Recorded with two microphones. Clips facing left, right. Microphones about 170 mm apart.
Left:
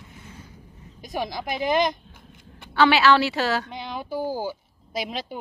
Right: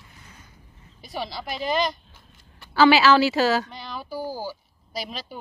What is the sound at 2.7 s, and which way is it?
A woman's voice, centre (ahead or behind).